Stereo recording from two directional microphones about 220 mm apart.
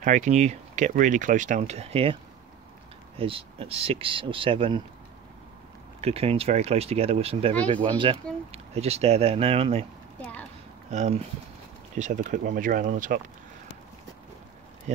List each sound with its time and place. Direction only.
0.0 s speech: 35° right (ahead or behind)
3.2 s speech: 25° right (ahead or behind)
5.9 s speech: 25° right (ahead or behind)
10.9 s speech: 30° right (ahead or behind)